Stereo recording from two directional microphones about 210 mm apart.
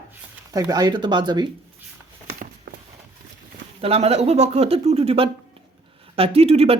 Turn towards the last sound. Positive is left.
turn(degrees=-30)  # may be behind; listen again after turning